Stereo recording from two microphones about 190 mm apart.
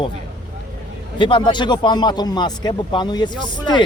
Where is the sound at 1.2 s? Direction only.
25° left (ahead or behind).